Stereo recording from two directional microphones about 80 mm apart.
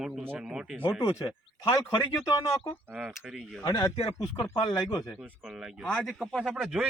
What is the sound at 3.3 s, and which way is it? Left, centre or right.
Speech, centre.